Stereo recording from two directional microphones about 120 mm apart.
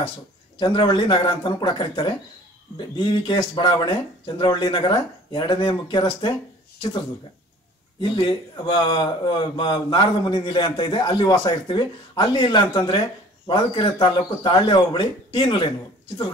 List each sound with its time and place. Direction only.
0.7 s a man's voice: 40° left (ahead or behind)
8.0 s a man's voice: 45° left (ahead or behind)